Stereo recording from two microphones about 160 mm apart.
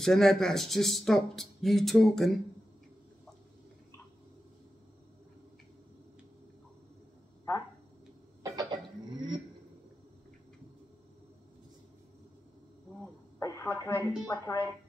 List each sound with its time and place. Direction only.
0.0 s speech: centre (ahead or behind)
8.4 s a sound: 25° right (ahead or behind)
13.4 s speech: 20° left (ahead or behind)